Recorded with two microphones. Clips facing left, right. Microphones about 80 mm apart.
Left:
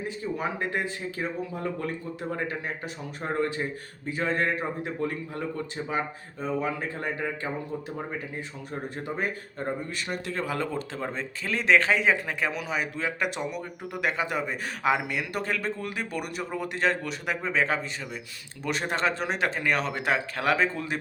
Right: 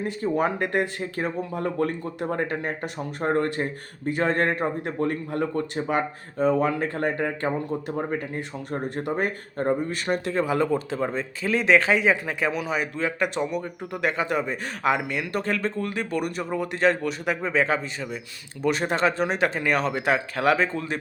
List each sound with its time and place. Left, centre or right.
0.0 s speech: right
10.3 s speech: centre